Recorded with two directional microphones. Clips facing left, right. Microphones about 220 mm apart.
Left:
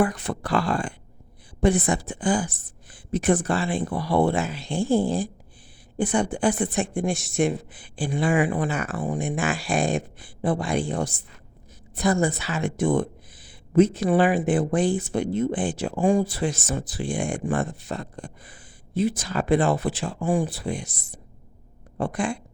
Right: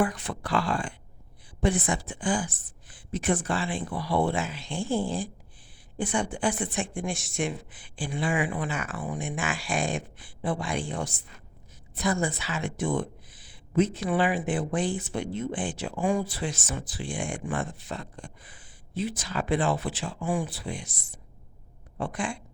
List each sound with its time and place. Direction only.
0.0 s a woman's voice: 40° left (ahead or behind)
21.9 s a woman's voice: 40° left (ahead or behind)